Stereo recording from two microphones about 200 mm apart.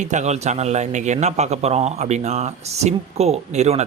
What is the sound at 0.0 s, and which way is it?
A man's voice, 35° right (ahead or behind).